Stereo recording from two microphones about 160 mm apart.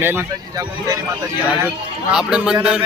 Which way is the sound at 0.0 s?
15° right (ahead or behind).